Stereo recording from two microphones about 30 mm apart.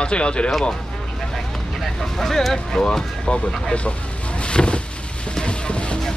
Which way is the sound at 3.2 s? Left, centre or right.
Left.